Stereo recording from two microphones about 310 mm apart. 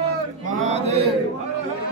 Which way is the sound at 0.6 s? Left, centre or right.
Right.